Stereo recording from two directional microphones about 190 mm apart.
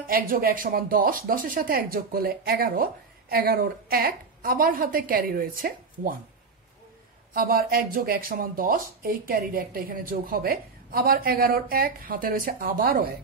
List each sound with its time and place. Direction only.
0.0 s speech: 50° right (ahead or behind)
7.3 s speech: 50° right (ahead or behind)